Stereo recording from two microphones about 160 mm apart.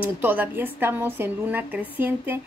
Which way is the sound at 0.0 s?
10° right (ahead or behind).